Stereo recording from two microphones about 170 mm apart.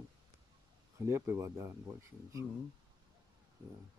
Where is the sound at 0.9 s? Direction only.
15° right (ahead or behind).